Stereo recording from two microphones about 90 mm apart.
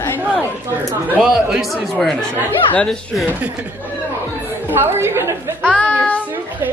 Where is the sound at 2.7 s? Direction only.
15° left (ahead or behind).